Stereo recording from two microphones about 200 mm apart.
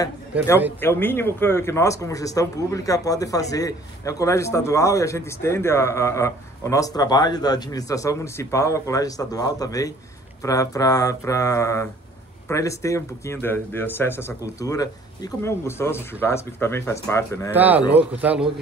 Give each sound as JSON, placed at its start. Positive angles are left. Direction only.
{"t": 0.7, "sound": "speech", "side_deg": 10}
{"t": 17.6, "sound": "speech", "side_deg": -10}